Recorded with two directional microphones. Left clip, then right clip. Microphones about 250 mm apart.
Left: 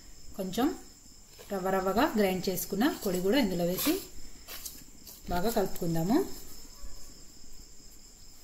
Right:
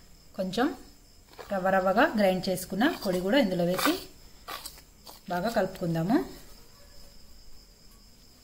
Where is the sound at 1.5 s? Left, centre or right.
Right.